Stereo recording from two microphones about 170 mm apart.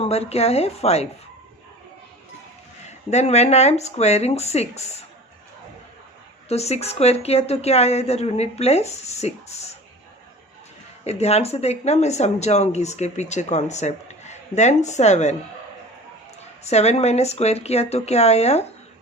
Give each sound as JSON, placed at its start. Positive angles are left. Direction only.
{"t": 0.0, "sound": "speech", "side_deg": 40}
{"t": 3.1, "sound": "speech", "side_deg": 40}
{"t": 6.5, "sound": "speech", "side_deg": 40}
{"t": 11.0, "sound": "speech", "side_deg": 40}
{"t": 16.4, "sound": "speech", "side_deg": 40}